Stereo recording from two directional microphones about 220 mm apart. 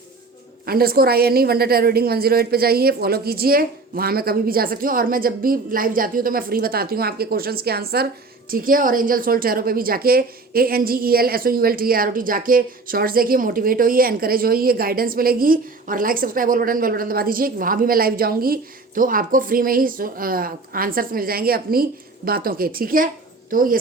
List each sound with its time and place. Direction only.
0.6 s a woman's voice: 45° right (ahead or behind)